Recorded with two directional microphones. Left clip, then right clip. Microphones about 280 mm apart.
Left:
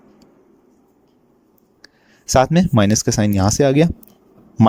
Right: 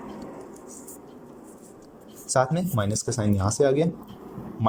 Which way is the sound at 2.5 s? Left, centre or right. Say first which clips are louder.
Left 11 dB; left.